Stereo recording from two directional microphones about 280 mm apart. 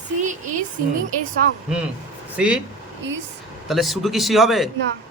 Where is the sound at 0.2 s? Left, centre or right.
Right.